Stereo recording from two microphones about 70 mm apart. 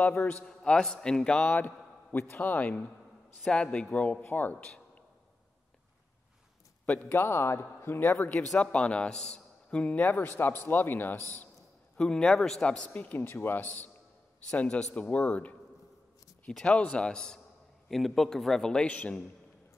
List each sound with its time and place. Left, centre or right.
0.0 s a man's voice: left
0.5 s a man's voice: centre
2.1 s a man's voice: left; by 5.0 s centre
7.0 s a man's voice: left
8.4 s a man's voice: centre; by 11.2 s left
12.0 s a man's voice: centre; by 13.8 s left
14.5 s a man's voice: centre